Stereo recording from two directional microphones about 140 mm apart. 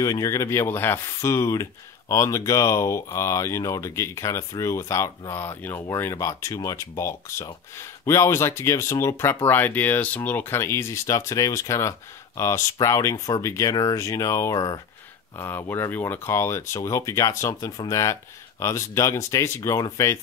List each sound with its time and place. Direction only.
0.0 s speech: 25° left (ahead or behind)
15.3 s speech: 15° left (ahead or behind)